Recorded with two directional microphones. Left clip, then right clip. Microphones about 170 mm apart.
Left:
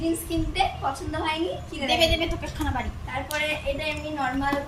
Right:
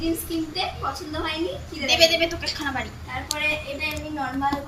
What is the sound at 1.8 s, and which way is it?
Speech, 50° left (ahead or behind).